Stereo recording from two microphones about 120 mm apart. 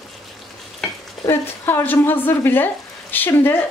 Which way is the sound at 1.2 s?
20° left (ahead or behind).